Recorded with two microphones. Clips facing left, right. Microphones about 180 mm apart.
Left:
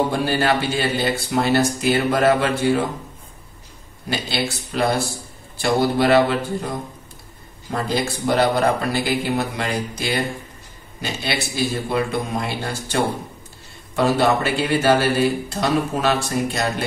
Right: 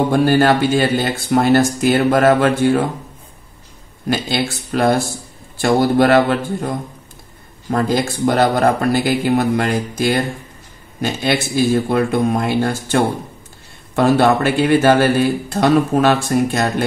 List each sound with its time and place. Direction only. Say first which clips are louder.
0.1 s speech: right 7 dB; 50° right (ahead or behind)
4.1 s speech: right 5 dB; 50° right (ahead or behind)
7.7 s speech: right 5 dB; 50° right (ahead or behind)